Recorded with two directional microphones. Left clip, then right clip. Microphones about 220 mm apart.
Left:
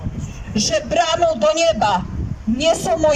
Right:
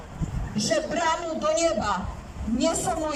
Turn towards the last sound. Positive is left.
turn(degrees=45)  # may be behind; listen again after turning